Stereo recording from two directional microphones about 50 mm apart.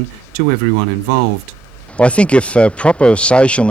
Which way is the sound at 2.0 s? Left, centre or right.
Left.